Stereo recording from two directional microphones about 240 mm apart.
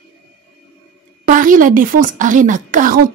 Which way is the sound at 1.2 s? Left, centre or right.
Right.